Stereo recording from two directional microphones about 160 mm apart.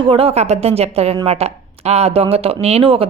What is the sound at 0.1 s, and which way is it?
A woman's voice, 35° right (ahead or behind).